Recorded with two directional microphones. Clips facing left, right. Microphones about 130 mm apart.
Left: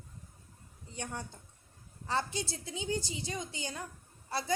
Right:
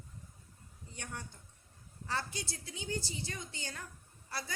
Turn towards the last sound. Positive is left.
turn(degrees=25)  # may be behind; listen again after turning